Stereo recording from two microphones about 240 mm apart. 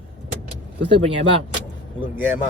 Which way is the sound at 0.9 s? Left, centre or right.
Right.